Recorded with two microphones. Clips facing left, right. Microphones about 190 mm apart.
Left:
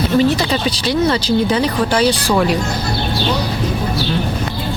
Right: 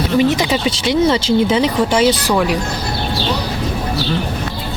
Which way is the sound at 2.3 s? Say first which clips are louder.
Left 1 dB; 5° right (ahead or behind).